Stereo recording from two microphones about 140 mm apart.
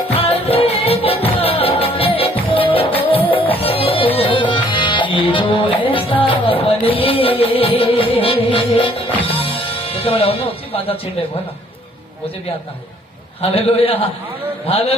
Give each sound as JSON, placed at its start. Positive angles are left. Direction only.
{"t": 0.2, "sound": "music", "side_deg": 45}
{"t": 13.4, "sound": "a man's voice", "side_deg": 45}